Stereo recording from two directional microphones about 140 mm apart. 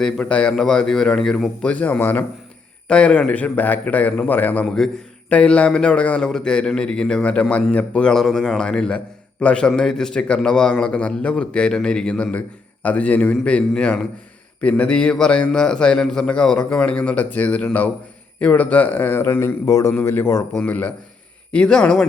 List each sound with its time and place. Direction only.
0.0 s a man's voice: 5° left (ahead or behind)